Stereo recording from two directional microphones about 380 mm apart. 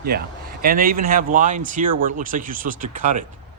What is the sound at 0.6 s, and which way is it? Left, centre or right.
Speech, right.